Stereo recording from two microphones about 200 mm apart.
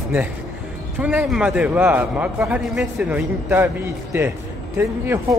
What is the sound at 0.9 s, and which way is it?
A man's voice, 5° right (ahead or behind).